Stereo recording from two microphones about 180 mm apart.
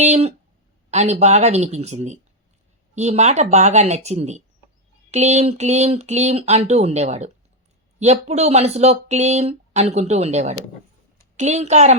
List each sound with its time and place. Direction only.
0.0 s speech: 40° right (ahead or behind)